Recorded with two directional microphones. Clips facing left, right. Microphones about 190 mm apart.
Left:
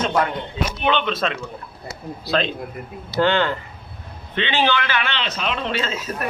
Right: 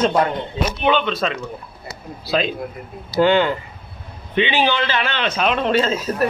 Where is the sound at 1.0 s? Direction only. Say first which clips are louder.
Right 1 dB; centre (ahead or behind).